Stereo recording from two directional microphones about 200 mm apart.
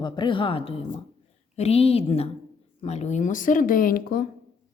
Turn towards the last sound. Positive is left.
turn(degrees=45)  # may be behind; listen again after turning